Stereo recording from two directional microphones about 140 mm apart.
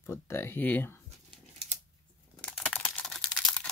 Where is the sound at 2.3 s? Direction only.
10° left (ahead or behind).